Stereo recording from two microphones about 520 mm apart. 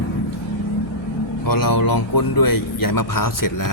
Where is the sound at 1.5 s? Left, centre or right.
Left.